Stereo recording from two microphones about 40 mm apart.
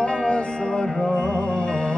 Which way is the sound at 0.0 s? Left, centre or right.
Left.